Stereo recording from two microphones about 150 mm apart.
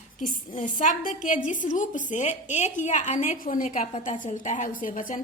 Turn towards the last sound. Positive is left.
turn(degrees=65)  # may be behind; listen again after turning